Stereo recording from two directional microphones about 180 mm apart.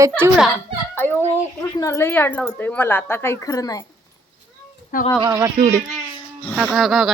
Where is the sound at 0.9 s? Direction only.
10° left (ahead or behind).